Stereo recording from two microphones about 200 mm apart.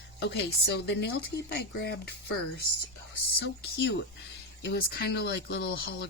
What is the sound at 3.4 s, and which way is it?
Speech, 55° left (ahead or behind).